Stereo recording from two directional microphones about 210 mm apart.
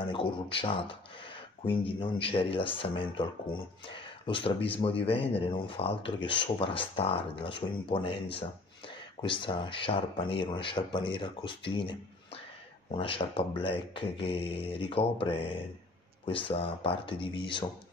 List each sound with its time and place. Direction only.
0.1 s speech: 25° left (ahead or behind)